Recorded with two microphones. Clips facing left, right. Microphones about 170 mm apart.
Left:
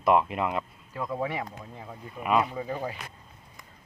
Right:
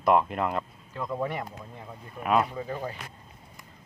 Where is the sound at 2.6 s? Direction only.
15° left (ahead or behind).